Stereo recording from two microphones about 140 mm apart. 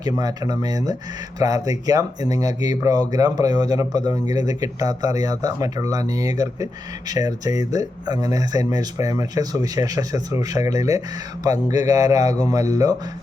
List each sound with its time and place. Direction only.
0.0 s speech: 25° right (ahead or behind)